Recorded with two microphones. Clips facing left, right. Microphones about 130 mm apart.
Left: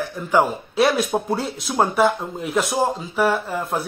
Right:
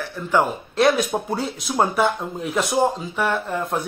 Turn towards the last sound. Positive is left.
turn(degrees=5)  # may be behind; listen again after turning